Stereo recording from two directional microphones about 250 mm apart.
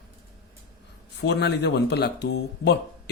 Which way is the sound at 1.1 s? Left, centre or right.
Left.